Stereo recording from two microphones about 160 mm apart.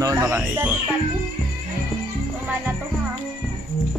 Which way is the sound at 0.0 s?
15° right (ahead or behind).